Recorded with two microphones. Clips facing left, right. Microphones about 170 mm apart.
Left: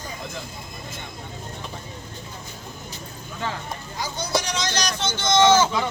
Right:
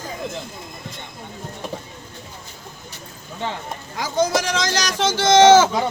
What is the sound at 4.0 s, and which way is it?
Speech, 90° right.